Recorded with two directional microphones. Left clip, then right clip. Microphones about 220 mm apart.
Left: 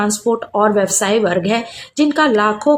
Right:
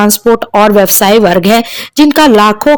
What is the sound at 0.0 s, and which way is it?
Speech, 45° right (ahead or behind).